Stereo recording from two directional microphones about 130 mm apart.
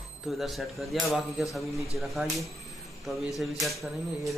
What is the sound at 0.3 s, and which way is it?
Speech, centre (ahead or behind).